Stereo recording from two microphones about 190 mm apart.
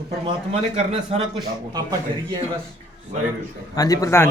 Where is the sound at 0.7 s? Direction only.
35° right (ahead or behind).